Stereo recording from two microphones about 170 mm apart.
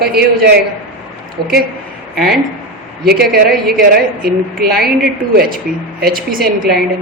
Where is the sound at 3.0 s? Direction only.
65° right (ahead or behind).